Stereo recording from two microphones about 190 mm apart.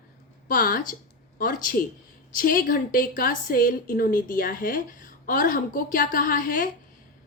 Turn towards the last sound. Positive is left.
turn(degrees=45)  # may be behind; listen again after turning